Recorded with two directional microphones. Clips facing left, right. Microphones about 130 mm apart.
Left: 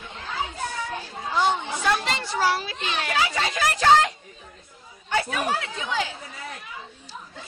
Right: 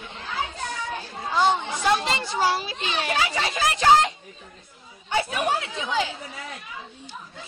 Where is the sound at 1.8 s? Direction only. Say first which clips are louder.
Right 2 dB; 20° right (ahead or behind).